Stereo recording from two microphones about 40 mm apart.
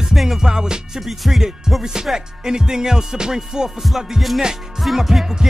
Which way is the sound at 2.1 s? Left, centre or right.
Centre.